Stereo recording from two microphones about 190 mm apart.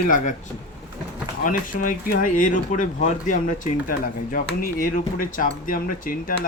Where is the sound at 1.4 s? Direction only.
45° left (ahead or behind).